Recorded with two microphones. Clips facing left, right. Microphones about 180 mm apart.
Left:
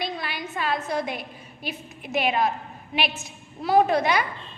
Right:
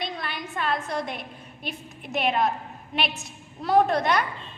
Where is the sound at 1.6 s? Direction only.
5° left (ahead or behind).